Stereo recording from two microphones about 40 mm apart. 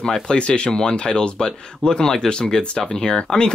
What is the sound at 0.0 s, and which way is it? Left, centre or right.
Speech, centre.